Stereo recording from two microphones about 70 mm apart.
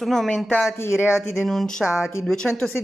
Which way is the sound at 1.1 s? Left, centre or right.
Centre.